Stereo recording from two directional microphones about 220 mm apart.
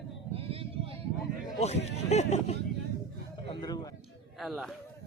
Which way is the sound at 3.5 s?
20° left (ahead or behind).